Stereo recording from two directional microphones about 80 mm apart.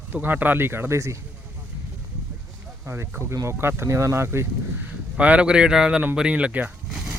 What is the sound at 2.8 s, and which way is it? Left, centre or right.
Speech, right.